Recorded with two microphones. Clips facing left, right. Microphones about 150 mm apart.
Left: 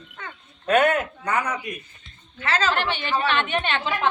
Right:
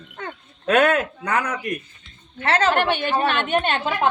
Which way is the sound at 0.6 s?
90° right.